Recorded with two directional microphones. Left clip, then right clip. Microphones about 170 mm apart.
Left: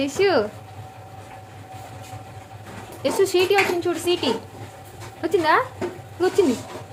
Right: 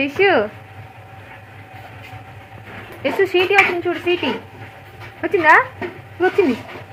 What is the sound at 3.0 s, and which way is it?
Speech, 15° left (ahead or behind).